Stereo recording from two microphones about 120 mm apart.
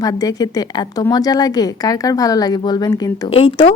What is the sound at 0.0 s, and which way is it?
A woman's voice, 30° left (ahead or behind).